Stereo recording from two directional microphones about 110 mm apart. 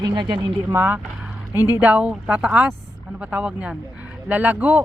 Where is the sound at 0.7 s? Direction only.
20° right (ahead or behind).